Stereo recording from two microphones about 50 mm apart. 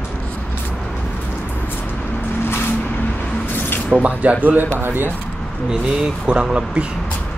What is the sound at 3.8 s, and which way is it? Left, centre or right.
Speech, right.